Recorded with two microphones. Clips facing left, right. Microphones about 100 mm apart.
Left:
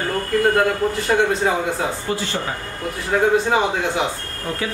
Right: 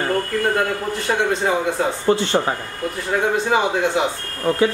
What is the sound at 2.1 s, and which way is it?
Speech, 35° right (ahead or behind).